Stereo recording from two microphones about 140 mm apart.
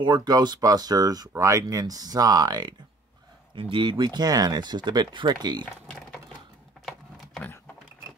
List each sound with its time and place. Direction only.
0.0 s speech: 30° right (ahead or behind)